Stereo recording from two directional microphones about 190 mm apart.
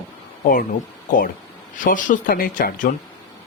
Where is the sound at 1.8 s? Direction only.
45° left (ahead or behind).